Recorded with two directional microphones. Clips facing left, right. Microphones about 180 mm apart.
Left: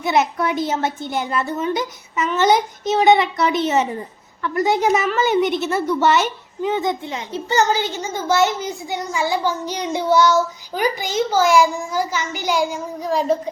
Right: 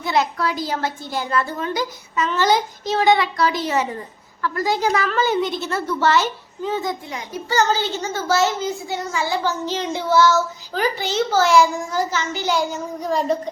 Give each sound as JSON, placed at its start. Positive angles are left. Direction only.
{"t": 0.0, "sound": "a woman's voice", "side_deg": 20}